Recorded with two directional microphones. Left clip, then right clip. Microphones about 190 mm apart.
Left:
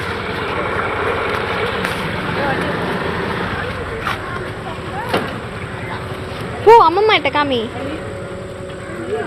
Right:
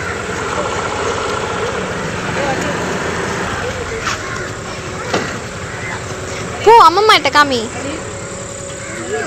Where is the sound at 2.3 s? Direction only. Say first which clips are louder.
Right 2 dB; 35° right (ahead or behind).